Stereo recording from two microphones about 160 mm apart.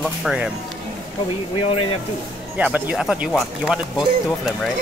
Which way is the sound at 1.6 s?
35° left (ahead or behind).